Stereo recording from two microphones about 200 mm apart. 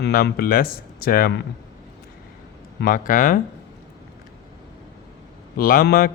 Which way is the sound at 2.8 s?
45° left (ahead or behind).